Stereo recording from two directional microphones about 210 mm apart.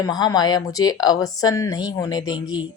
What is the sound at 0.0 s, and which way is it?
A woman's voice, 20° left (ahead or behind).